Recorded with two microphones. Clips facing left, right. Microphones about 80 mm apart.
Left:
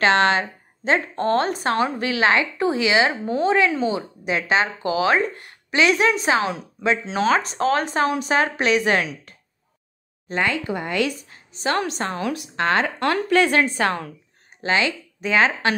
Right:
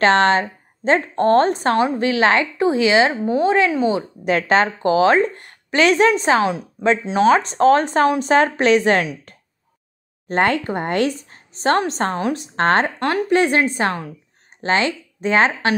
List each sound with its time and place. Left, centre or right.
0.0 s a woman's voice: right
4.3 s speech: right
10.2 s speech: right
13.0 s a woman's voice: right
14.6 s speech: right